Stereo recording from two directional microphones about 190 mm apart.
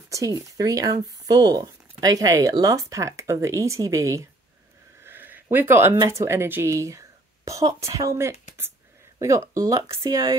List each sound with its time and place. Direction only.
0.1 s speech: 15° right (ahead or behind)
5.0 s a sound: 10° right (ahead or behind)
6.0 s speech: 15° right (ahead or behind)